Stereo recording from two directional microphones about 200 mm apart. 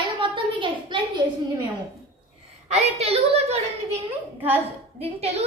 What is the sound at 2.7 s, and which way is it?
Speech, 30° right (ahead or behind).